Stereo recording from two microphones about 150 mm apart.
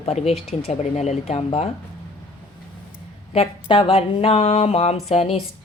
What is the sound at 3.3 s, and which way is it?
Speech, 40° left (ahead or behind).